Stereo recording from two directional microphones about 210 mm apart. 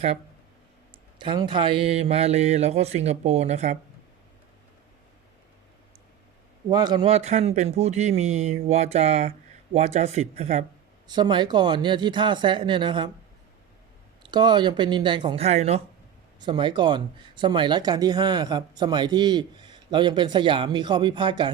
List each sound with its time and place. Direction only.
1.2 s speech: 20° right (ahead or behind)
6.7 s speech: 20° right (ahead or behind)
14.2 s speech: 20° right (ahead or behind)